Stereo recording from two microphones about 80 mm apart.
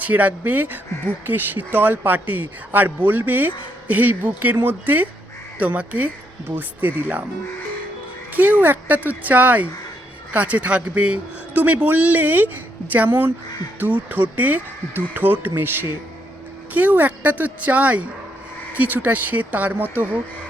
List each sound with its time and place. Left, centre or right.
0.0 s a man's voice: centre
8.3 s a man's voice: right